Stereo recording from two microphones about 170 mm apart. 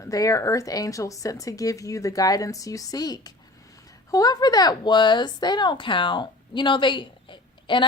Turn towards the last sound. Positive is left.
turn(degrees=30)  # may be behind; listen again after turning